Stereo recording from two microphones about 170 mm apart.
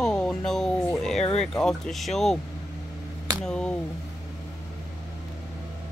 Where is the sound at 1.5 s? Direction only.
5° left (ahead or behind).